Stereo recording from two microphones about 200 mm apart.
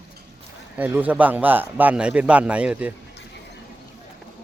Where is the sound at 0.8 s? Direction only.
10° right (ahead or behind).